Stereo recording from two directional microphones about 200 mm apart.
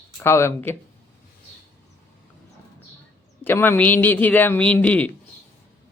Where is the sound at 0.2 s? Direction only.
10° left (ahead or behind).